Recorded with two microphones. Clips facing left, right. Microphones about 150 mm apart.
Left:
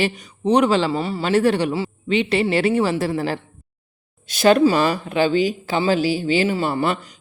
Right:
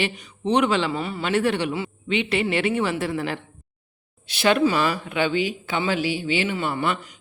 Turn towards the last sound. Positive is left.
turn(degrees=40)  # may be behind; listen again after turning